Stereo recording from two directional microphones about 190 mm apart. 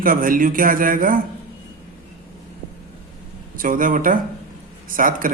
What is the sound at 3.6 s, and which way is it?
A man's voice, 45° right (ahead or behind).